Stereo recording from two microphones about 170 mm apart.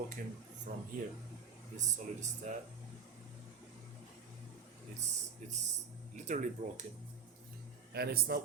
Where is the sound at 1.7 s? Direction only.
45° right (ahead or behind).